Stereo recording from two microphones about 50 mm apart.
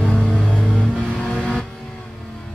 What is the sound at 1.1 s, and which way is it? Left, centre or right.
Vehicle, centre.